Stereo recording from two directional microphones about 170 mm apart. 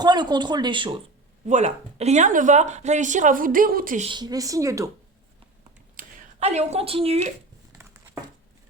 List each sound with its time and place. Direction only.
0.0 s speech: 25° right (ahead or behind)
1.5 s speech: 40° right (ahead or behind)
4.0 s speech: 25° right (ahead or behind)
6.0 s a sound: 55° right (ahead or behind)
6.4 s speech: 40° right (ahead or behind)